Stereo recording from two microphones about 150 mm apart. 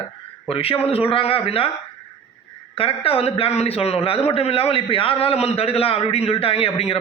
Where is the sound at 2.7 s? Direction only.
40° left (ahead or behind).